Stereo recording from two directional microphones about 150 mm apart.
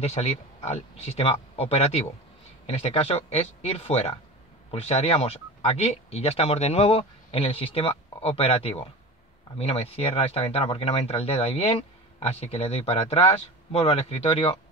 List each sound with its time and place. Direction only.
0.0 s speech: 45° left (ahead or behind)